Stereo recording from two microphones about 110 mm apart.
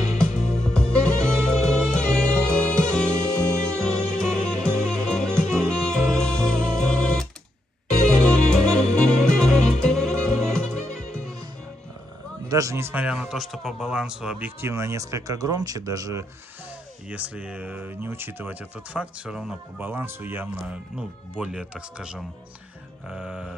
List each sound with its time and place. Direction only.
0.2 s music: 5° left (ahead or behind)
12.4 s a man's voice: 30° right (ahead or behind)
13.0 s speech: 5° right (ahead or behind)
14.6 s speech: 25° right (ahead or behind)
17.1 s speech: 15° right (ahead or behind)
19.8 s speech: 20° right (ahead or behind)
21.4 s speech: 10° right (ahead or behind)